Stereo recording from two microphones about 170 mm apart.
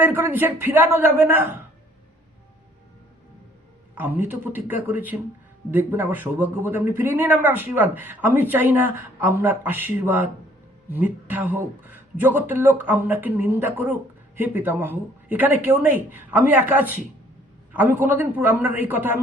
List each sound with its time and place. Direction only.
0.0 s speech: 10° right (ahead or behind)
3.9 s speech: 10° right (ahead or behind)